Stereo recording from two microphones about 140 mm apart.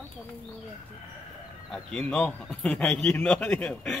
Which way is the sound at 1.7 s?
5° left (ahead or behind).